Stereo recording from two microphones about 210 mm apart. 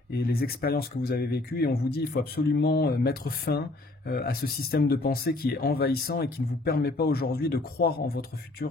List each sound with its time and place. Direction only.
0.1 s speech: 45° left (ahead or behind)